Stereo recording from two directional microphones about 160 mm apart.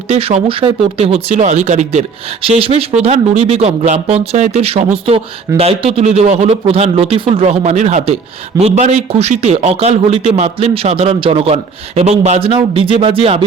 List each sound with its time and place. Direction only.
0.1 s speech: 40° right (ahead or behind)